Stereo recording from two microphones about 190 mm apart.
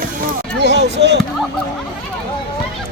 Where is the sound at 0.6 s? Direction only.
60° right (ahead or behind).